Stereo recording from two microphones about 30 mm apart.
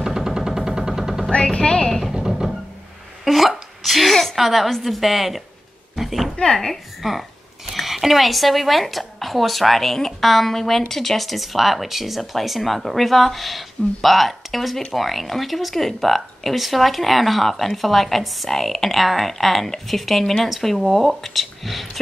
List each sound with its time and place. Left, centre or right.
0.0 s a sound: centre
1.6 s speech: centre
2.1 s music: centre
3.3 s hiccup: centre
4.4 s speech: centre
5.9 s a sound: centre
6.3 s speech: centre
7.0 s speech: centre